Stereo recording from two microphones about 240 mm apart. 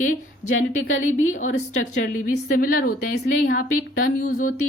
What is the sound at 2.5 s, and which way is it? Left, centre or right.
Speech, left.